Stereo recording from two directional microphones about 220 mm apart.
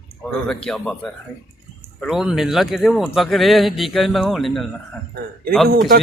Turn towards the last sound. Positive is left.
turn(degrees=-45)  # may be behind; listen again after turning